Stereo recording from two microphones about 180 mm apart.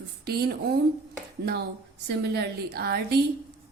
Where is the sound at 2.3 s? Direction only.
60° right (ahead or behind).